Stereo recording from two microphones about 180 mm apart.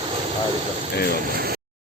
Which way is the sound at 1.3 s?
55° right (ahead or behind).